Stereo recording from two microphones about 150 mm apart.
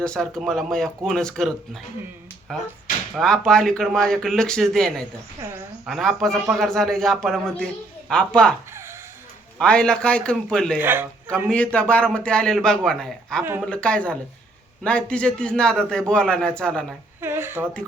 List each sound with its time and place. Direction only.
0.0 s a man's voice: 5° left (ahead or behind)
8.7 s a sound: 15° right (ahead or behind)
9.6 s a man's voice: 5° left (ahead or behind)
10.8 s speech: 15° right (ahead or behind)
11.4 s a man's voice: 10° left (ahead or behind)
17.2 s speech: 15° right (ahead or behind)